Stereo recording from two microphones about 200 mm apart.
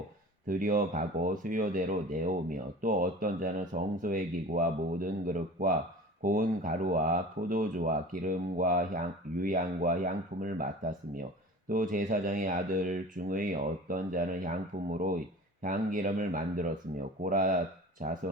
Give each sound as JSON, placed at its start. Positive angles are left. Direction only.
{"t": 0.4, "sound": "speech", "side_deg": -40}
{"t": 11.7, "sound": "speech", "side_deg": -40}